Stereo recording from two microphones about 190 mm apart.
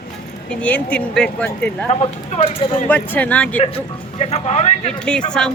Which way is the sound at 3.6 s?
30° left (ahead or behind).